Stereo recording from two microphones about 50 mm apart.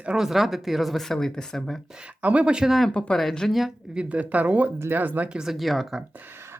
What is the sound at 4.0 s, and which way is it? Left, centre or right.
Speech, right.